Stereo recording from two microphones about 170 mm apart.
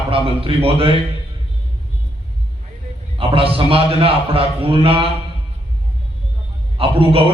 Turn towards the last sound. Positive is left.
turn(degrees=-35)  # may be behind; listen again after turning